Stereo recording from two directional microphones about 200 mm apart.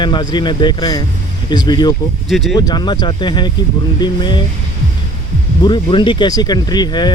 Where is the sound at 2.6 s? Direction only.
20° left (ahead or behind).